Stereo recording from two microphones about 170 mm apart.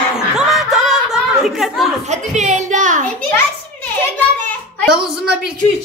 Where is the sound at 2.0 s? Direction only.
40° right (ahead or behind).